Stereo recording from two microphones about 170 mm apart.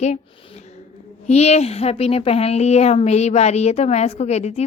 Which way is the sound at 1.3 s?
40° left (ahead or behind).